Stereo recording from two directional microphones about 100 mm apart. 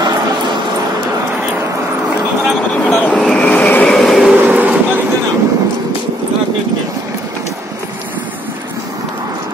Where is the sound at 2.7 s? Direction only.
15° left (ahead or behind).